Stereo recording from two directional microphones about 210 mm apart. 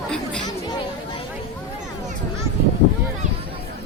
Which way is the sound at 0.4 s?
20° left (ahead or behind).